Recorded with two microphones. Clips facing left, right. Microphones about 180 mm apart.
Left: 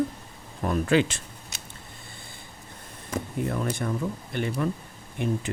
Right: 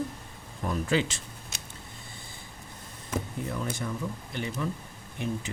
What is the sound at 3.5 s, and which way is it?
Speech, 55° left (ahead or behind).